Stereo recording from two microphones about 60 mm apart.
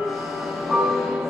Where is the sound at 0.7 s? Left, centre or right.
Centre.